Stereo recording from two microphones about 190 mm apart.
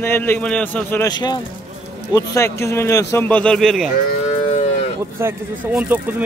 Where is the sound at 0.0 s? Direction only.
10° left (ahead or behind).